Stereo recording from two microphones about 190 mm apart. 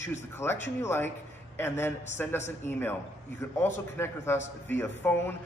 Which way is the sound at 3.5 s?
15° left (ahead or behind).